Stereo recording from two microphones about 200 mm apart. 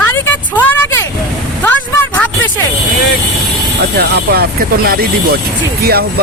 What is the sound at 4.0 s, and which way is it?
Speech, 50° right (ahead or behind).